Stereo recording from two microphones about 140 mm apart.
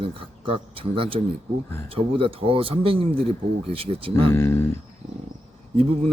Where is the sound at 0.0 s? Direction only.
40° right (ahead or behind).